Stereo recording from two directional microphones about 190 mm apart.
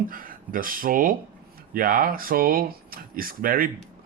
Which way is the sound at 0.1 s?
45° right (ahead or behind).